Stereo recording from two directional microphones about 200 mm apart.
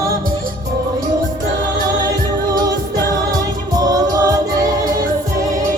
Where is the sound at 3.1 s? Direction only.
20° right (ahead or behind).